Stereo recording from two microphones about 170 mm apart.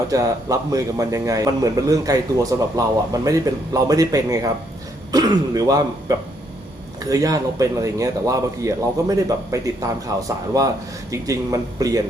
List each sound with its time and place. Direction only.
0.1 s a man's voice: 20° right (ahead or behind)